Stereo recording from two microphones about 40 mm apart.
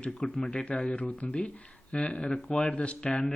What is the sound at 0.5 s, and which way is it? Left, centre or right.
Speech, left.